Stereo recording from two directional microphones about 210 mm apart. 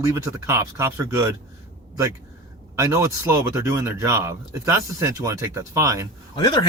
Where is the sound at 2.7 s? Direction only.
15° right (ahead or behind).